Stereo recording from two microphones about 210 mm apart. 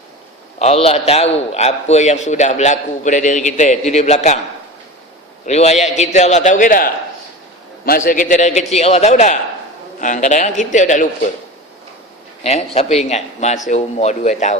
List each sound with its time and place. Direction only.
0.6 s a man's voice: 30° left (ahead or behind)
5.5 s a man's voice: 30° left (ahead or behind)
12.4 s a man's voice: 30° left (ahead or behind)